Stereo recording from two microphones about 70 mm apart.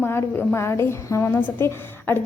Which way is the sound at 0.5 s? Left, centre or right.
Left.